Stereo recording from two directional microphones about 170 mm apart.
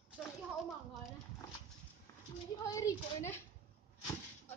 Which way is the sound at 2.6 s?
20° left (ahead or behind).